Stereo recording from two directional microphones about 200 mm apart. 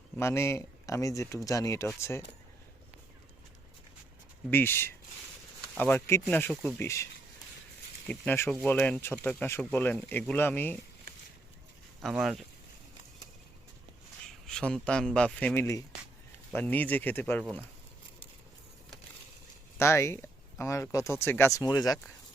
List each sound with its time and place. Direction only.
0.2 s speech: 15° left (ahead or behind)
4.5 s a man's voice: 10° left (ahead or behind)
12.0 s a man's voice: centre (ahead or behind)
14.4 s a man's voice: 5° left (ahead or behind)
19.8 s speech: 15° left (ahead or behind)